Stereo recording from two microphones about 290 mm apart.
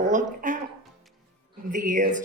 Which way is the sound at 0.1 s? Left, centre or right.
Right.